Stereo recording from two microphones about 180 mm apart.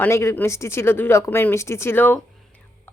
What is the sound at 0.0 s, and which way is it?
A woman's voice, 15° left (ahead or behind).